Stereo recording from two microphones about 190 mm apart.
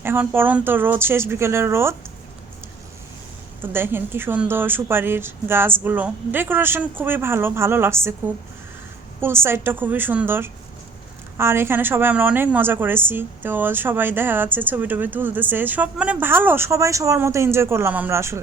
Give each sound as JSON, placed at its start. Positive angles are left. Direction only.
{"t": 0.0, "sound": "a woman's voice", "side_deg": -10}
{"t": 3.6, "sound": "a woman's voice", "side_deg": -10}
{"t": 9.2, "sound": "a woman's voice", "side_deg": -10}